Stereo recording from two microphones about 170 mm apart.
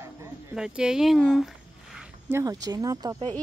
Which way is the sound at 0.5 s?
5° right (ahead or behind).